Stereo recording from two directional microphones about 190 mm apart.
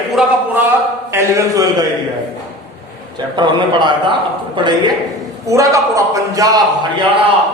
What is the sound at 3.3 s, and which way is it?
A man's voice, 25° right (ahead or behind).